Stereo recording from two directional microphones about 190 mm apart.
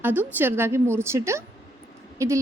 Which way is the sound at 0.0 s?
10° right (ahead or behind).